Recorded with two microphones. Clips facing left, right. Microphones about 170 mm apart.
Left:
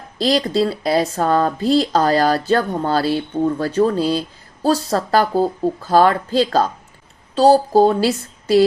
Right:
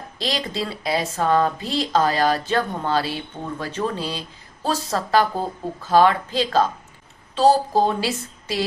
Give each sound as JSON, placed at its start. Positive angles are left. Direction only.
{"t": 0.2, "sound": "speech", "side_deg": 40}